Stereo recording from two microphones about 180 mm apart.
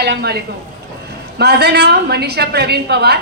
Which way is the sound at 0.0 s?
65° right (ahead or behind).